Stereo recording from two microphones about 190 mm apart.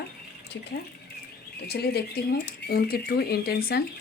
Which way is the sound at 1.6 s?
55° left (ahead or behind).